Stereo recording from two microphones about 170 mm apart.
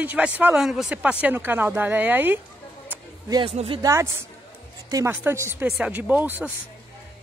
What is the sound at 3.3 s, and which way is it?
Speech, 35° right (ahead or behind).